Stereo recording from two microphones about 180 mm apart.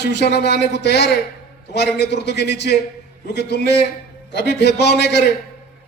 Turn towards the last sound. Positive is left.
turn(degrees=65)  # may be behind; listen again after turning